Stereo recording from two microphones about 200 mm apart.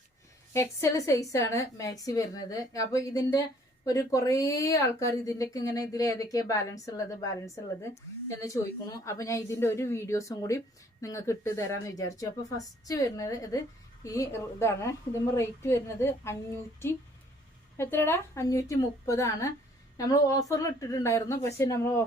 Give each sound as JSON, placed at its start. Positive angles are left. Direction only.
{"t": 0.5, "sound": "a woman's voice", "side_deg": 15}
{"t": 17.7, "sound": "a woman's voice", "side_deg": 10}